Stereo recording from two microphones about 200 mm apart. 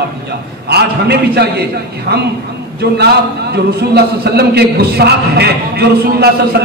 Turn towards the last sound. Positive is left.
turn(degrees=-55)  # may be behind; listen again after turning